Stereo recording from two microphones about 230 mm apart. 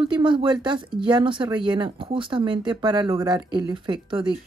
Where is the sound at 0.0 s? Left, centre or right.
Right.